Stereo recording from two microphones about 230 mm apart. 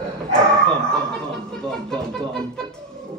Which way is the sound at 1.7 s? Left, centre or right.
Centre.